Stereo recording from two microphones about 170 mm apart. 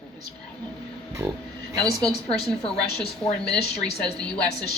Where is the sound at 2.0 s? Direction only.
5° left (ahead or behind).